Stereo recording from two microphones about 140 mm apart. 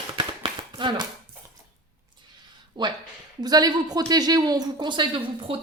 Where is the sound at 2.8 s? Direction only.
35° right (ahead or behind).